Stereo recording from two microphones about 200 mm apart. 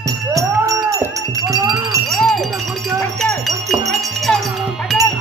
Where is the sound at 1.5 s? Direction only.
Centre (ahead or behind).